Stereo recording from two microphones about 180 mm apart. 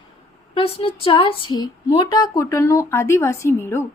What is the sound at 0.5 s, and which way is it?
Speech, 30° left (ahead or behind).